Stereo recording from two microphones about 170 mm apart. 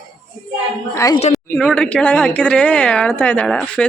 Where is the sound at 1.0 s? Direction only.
20° left (ahead or behind).